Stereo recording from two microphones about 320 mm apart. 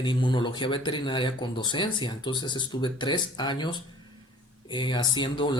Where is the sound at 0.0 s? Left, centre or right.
Centre.